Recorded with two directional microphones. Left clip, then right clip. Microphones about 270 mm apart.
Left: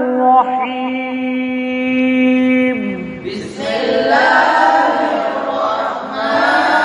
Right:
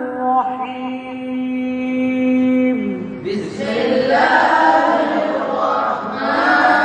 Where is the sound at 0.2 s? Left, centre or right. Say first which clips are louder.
Left 6 dB; left.